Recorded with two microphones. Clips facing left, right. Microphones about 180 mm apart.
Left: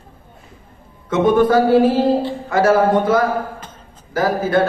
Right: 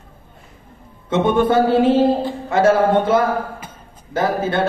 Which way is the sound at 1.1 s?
25° right (ahead or behind).